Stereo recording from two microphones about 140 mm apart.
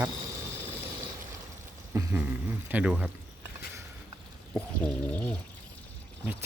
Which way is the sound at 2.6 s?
10° right (ahead or behind).